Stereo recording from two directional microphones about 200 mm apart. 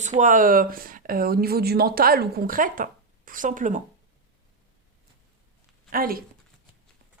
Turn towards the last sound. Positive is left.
turn(degrees=-45)  # may be behind; listen again after turning